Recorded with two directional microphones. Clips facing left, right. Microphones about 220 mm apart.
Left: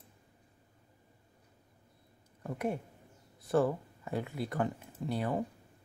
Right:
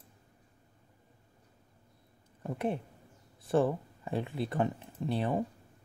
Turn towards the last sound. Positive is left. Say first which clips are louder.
# right 2 dB
turn(degrees=-25)  # may be behind; listen again after turning